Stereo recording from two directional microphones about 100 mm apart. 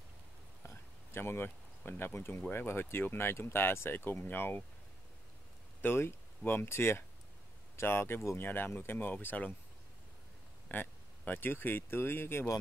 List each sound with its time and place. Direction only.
0.7 s a sound: 25° left (ahead or behind)
2.4 s speech: 20° left (ahead or behind)
5.8 s speech: 25° left (ahead or behind)
10.7 s speech: 20° left (ahead or behind)